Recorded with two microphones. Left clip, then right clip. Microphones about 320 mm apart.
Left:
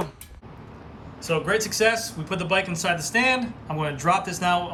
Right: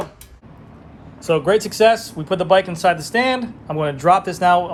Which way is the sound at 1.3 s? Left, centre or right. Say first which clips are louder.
Right 7 dB; centre.